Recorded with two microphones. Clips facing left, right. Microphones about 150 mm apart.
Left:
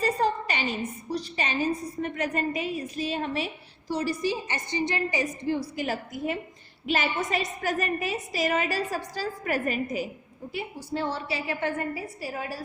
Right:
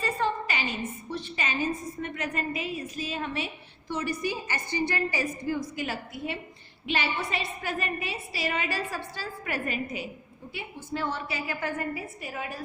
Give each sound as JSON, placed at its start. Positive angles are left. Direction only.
{"t": 0.0, "sound": "a sound", "side_deg": 40}
{"t": 1.1, "sound": "a woman's voice", "side_deg": 35}
{"t": 5.5, "sound": "a woman's voice", "side_deg": 35}